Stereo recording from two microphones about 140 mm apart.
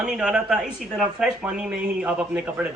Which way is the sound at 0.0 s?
5° right (ahead or behind).